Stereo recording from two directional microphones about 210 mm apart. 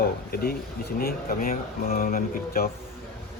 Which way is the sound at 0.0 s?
45° left (ahead or behind).